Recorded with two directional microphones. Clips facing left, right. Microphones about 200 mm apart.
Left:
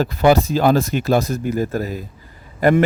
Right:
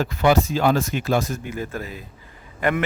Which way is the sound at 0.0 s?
35° left (ahead or behind).